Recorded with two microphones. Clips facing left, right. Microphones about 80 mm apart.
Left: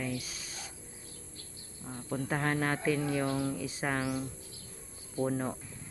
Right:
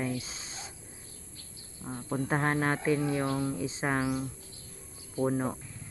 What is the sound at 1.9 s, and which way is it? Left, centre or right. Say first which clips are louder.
Speech: right 3 dB; centre.